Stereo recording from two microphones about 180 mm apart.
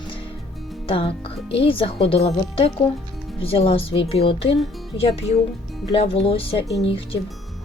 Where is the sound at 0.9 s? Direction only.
30° left (ahead or behind).